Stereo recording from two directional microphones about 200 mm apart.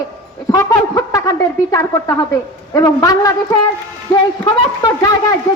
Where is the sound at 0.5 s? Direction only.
20° left (ahead or behind).